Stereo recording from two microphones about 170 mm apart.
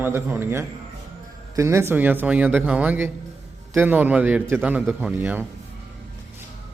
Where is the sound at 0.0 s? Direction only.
10° right (ahead or behind).